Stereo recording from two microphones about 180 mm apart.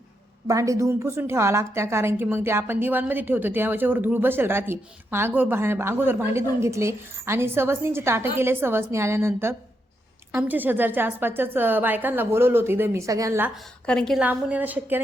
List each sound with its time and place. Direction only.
0.4 s a woman's voice: 20° right (ahead or behind)
13.8 s a woman's voice: 5° left (ahead or behind)